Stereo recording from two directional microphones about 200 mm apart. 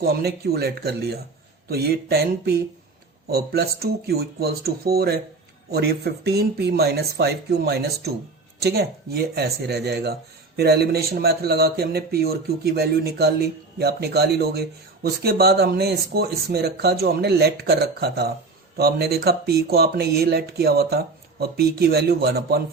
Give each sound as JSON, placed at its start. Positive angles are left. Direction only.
{"t": 0.0, "sound": "speech", "side_deg": -50}